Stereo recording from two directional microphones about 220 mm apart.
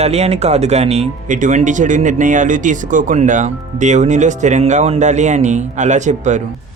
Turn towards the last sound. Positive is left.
turn(degrees=-35)  # may be behind; listen again after turning